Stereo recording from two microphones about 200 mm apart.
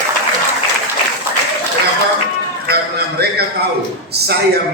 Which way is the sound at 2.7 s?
50° right (ahead or behind).